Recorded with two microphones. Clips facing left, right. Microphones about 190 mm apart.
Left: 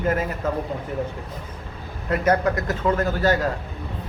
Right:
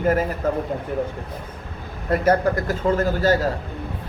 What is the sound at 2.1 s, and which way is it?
A man's voice, 30° right (ahead or behind).